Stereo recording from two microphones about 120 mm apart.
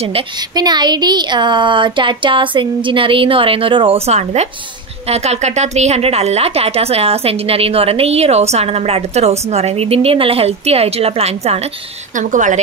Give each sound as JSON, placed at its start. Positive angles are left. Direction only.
{"t": 0.6, "sound": "a woman's voice", "side_deg": -35}
{"t": 12.2, "sound": "speech", "side_deg": -90}